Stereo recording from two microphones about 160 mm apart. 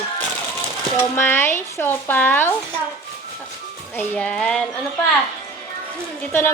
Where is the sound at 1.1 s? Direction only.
15° left (ahead or behind).